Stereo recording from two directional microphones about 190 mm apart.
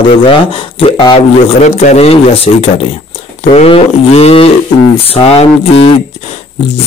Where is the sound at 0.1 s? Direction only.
30° left (ahead or behind).